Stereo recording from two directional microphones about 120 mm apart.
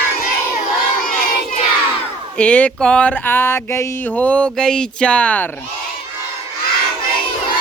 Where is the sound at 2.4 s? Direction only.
10° left (ahead or behind).